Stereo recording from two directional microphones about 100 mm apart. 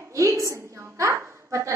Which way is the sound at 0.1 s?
30° right (ahead or behind).